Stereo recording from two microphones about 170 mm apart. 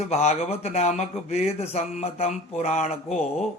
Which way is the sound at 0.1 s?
40° left (ahead or behind).